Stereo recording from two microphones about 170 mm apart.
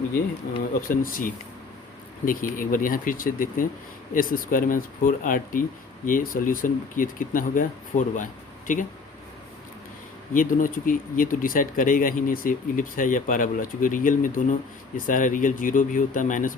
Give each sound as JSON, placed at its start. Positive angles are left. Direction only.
{"t": 0.8, "sound": "speech", "side_deg": 55}
{"t": 10.3, "sound": "speech", "side_deg": 50}